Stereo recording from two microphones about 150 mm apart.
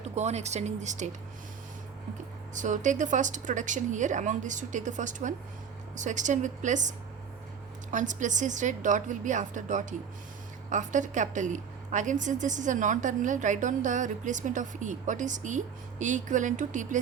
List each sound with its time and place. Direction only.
0.0 s speech: 45° right (ahead or behind)
2.6 s a woman's voice: 55° right (ahead or behind)